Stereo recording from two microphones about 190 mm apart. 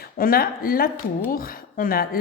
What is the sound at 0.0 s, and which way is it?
Speech, 50° left (ahead or behind).